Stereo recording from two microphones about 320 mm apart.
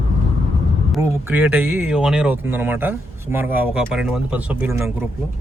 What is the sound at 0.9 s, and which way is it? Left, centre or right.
Speech, centre.